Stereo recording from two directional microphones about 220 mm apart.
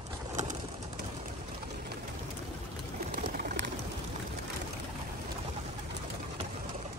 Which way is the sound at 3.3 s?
40° right (ahead or behind).